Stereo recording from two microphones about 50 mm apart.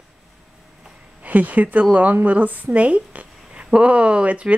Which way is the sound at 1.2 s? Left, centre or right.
Right.